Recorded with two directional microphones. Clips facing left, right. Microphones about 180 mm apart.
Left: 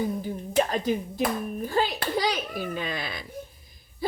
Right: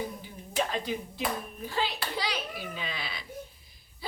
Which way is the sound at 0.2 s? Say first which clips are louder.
Left 7 dB; 45° left (ahead or behind).